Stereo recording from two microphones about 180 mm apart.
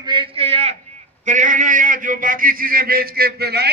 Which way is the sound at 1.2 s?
45° right (ahead or behind).